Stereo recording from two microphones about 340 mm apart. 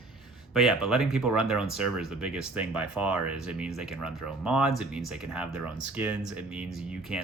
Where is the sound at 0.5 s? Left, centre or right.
Centre.